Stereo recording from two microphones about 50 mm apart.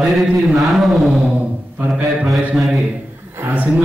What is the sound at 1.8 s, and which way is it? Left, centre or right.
Speech, right.